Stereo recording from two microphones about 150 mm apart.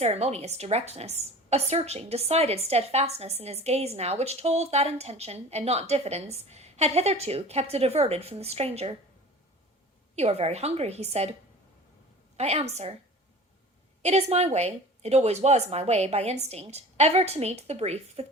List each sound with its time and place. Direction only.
0.0 s a woman's voice: 45° right (ahead or behind)
10.2 s a woman's voice: 45° right (ahead or behind)
12.4 s a woman's voice: 45° right (ahead or behind)
14.0 s a woman's voice: 45° right (ahead or behind)